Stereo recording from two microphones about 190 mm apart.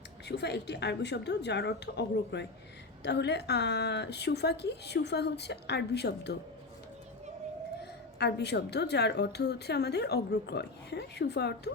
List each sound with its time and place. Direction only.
0.3 s a woman's voice: 60° left (ahead or behind)
8.2 s a woman's voice: 60° left (ahead or behind)